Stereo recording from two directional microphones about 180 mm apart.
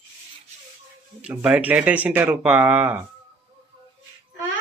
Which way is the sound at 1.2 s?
5° right (ahead or behind).